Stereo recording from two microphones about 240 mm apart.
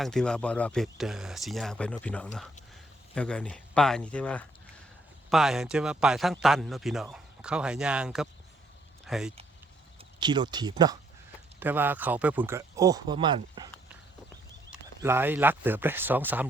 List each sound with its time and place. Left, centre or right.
0.0 s a man's voice: centre
10.0 s speech: centre
14.7 s speech: centre